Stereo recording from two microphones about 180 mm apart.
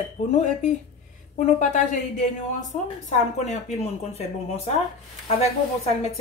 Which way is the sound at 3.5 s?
40° left (ahead or behind).